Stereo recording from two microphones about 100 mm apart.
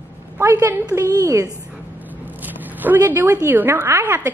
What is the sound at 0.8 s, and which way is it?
Speech, 35° right (ahead or behind).